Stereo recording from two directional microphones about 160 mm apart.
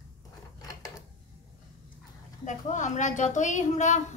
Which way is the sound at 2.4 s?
50° left (ahead or behind).